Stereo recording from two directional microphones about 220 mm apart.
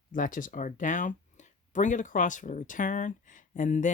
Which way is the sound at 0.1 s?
35° left (ahead or behind).